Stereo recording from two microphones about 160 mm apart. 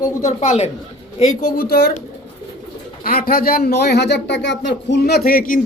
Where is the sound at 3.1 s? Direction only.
65° left (ahead or behind).